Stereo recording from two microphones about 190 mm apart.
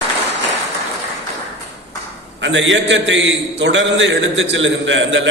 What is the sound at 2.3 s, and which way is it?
A man's voice, 75° right (ahead or behind).